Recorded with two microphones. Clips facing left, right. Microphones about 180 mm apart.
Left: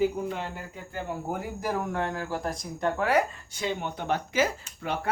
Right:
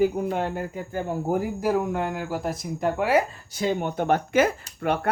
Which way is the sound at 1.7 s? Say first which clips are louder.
Right 4 dB; 15° right (ahead or behind).